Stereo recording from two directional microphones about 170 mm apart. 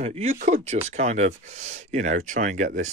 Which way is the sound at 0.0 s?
35° right (ahead or behind).